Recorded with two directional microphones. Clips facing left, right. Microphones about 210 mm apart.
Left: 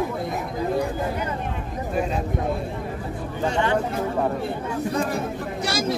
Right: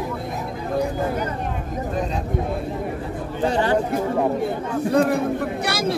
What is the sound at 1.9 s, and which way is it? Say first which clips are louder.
Speech: left 2 dB; 5° left (ahead or behind).